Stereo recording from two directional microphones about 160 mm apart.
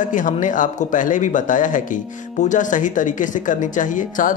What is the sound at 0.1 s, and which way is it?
Speech, 55° left (ahead or behind).